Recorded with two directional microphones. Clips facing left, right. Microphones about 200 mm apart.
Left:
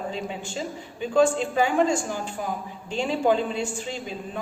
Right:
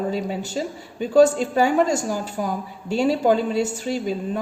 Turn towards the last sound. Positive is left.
turn(degrees=-40)  # may be behind; listen again after turning